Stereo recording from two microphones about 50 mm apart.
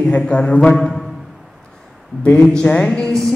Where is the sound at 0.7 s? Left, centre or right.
Centre.